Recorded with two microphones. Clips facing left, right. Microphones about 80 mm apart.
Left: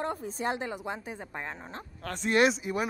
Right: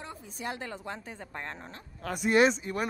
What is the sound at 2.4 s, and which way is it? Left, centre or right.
Speech, centre.